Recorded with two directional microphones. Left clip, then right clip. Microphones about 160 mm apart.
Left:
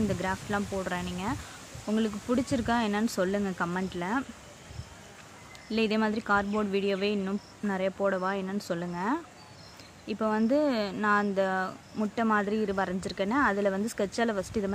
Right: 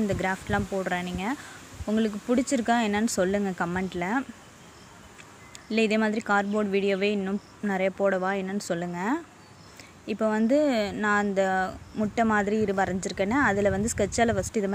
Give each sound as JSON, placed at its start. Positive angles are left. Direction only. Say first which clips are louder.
{"t": 0.1, "sound": "speech", "louder": "right 4 dB", "side_deg": -15}
{"t": 5.7, "sound": "speech", "louder": "right 3 dB", "side_deg": -15}